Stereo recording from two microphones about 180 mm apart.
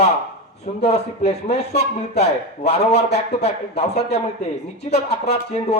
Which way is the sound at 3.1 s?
35° left (ahead or behind).